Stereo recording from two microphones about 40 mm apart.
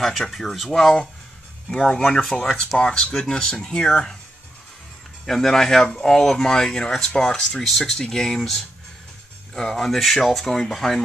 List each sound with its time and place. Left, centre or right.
0.0 s speech: centre
0.7 s speech: centre
5.2 s speech: centre
7.6 s speech: centre
9.8 s speech: centre